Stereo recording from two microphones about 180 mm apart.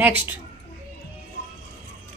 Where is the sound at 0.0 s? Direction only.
10° right (ahead or behind).